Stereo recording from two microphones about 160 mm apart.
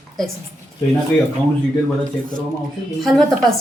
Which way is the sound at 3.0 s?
Centre (ahead or behind).